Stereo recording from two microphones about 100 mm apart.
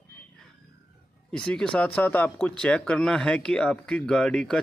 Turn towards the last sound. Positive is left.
turn(degrees=5)  # may be behind; listen again after turning